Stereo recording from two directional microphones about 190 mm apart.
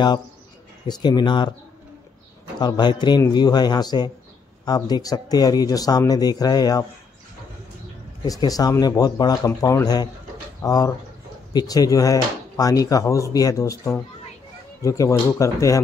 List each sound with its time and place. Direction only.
0.8 s speech: 20° left (ahead or behind)
2.6 s speech: 25° left (ahead or behind)
8.3 s speech: 20° left (ahead or behind)